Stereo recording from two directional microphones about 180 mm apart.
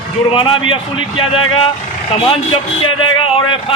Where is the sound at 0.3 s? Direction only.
30° left (ahead or behind).